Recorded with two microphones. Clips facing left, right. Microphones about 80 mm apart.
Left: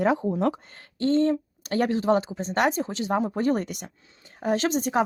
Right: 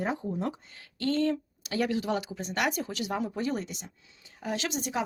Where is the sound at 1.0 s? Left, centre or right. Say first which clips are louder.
Left 6 dB; left.